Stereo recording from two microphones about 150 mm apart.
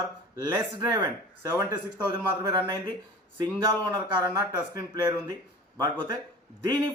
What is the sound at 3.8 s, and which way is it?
A man's voice, 25° right (ahead or behind).